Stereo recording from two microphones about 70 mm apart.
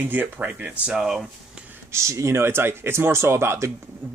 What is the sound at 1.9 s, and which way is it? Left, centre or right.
Speech, right.